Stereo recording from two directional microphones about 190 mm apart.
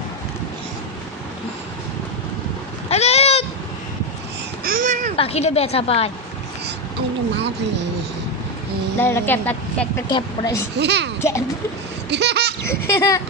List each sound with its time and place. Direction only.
2.9 s goat: 35° left (ahead or behind)
4.6 s babbling: 45° right (ahead or behind)
5.1 s a woman's voice: 30° left (ahead or behind)
8.9 s speech: 10° left (ahead or behind)
10.0 s a woman's voice: 20° left (ahead or behind)
10.8 s a child's voice: 60° right (ahead or behind)
11.1 s a child's voice: 15° left (ahead or behind)
12.1 s a sound: 65° right (ahead or behind)
12.6 s speech: 15° left (ahead or behind)